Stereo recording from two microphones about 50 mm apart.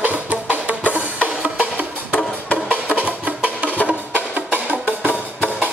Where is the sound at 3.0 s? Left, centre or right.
Right.